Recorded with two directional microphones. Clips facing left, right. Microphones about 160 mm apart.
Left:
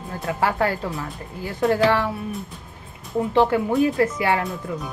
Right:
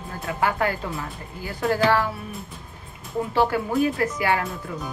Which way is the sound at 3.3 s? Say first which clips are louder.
Left 3 dB; 25° left (ahead or behind).